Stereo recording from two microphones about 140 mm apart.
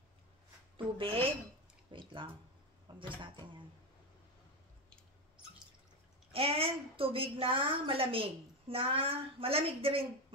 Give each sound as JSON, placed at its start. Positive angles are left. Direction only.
{"t": 0.7, "sound": "a woman's voice", "side_deg": -40}
{"t": 6.3, "sound": "a woman's voice", "side_deg": -40}